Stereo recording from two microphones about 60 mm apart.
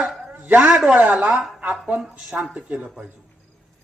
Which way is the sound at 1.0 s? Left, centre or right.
Right.